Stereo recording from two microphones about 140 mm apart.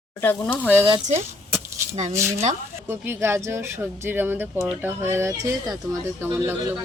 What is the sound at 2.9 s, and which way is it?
Speech, 15° right (ahead or behind).